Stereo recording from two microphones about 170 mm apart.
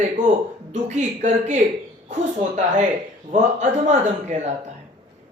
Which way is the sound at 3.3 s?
45° right (ahead or behind).